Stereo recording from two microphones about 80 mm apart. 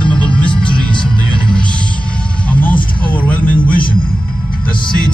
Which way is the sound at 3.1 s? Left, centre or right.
Centre.